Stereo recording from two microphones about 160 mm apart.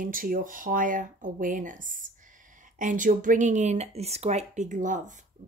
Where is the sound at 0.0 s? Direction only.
60° right (ahead or behind).